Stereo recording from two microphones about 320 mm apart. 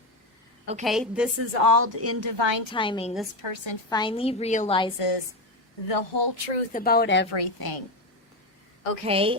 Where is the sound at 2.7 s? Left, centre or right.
Centre.